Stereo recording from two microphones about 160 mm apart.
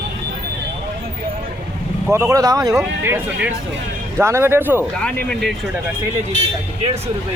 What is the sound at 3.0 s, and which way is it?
Speech, 10° right (ahead or behind).